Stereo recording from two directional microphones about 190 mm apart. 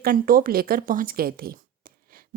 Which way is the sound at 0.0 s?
50° right (ahead or behind).